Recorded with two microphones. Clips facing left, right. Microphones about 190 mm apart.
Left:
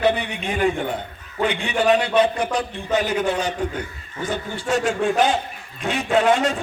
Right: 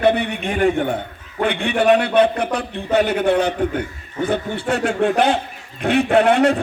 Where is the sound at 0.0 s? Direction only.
55° right (ahead or behind).